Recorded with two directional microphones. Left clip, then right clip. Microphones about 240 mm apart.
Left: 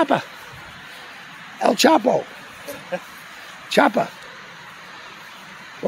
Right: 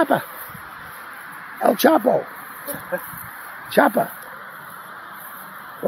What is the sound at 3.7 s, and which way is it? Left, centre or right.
Speech, centre.